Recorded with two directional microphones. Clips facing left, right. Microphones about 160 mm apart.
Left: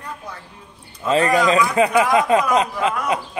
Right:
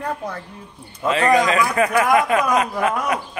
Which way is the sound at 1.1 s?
30° left (ahead or behind).